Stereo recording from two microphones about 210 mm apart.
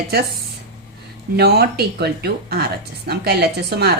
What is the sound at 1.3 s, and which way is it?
A woman's voice, 50° right (ahead or behind).